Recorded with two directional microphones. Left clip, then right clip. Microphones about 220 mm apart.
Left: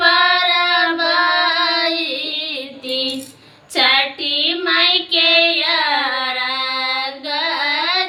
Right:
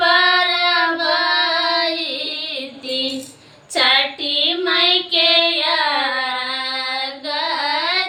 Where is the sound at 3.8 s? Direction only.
15° left (ahead or behind).